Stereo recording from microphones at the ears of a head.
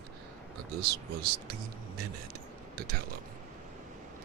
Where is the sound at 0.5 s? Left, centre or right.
Right.